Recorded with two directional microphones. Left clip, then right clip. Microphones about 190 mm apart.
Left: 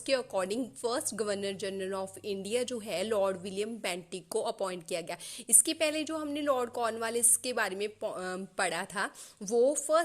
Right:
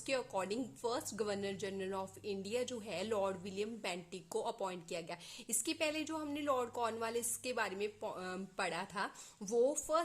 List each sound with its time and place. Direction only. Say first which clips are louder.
0.0 s a woman's voice: left 8 dB; 20° left (ahead or behind)